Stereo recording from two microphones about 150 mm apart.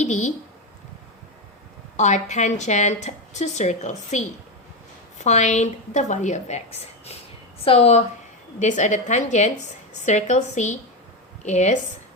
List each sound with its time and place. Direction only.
0.0 s speech: 55° left (ahead or behind)
2.0 s a woman's voice: 50° left (ahead or behind)
8.5 s a woman's voice: 55° left (ahead or behind)